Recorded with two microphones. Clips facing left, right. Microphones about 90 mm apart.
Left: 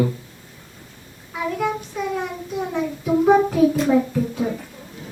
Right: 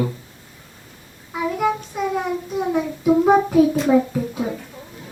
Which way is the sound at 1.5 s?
10° right (ahead or behind).